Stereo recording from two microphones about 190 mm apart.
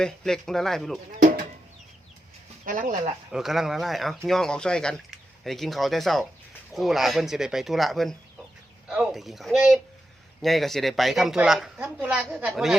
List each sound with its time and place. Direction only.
0.0 s a woman's voice: 5° left (ahead or behind)
2.6 s speech: 45° right (ahead or behind)
3.3 s a woman's voice: centre (ahead or behind)